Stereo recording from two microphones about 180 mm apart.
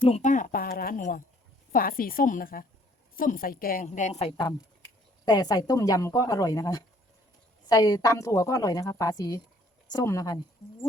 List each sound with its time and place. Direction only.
0.0 s a woman's voice: 40° left (ahead or behind); by 10.3 s 20° left (ahead or behind)